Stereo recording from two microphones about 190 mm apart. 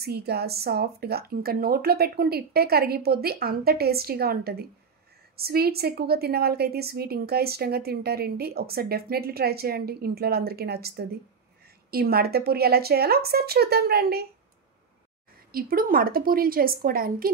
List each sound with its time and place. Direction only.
0.0 s a woman's voice: 55° right (ahead or behind)
15.5 s a woman's voice: 50° right (ahead or behind)